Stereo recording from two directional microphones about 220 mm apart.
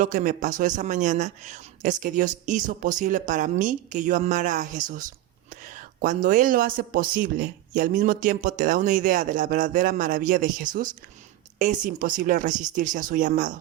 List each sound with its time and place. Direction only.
0.0 s speech: 35° right (ahead or behind)